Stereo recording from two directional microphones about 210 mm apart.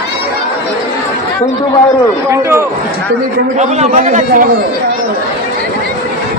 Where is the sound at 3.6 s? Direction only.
35° right (ahead or behind).